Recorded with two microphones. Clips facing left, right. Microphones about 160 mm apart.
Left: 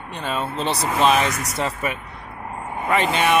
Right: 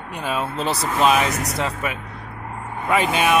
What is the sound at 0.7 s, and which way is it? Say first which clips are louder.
Speech: left 1 dB; 25° left (ahead or behind).